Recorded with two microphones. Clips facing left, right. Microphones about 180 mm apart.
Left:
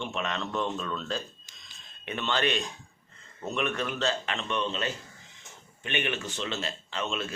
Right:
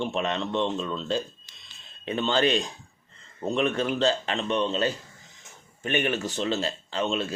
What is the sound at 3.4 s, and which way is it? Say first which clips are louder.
Speech: right 5 dB; 35° right (ahead or behind).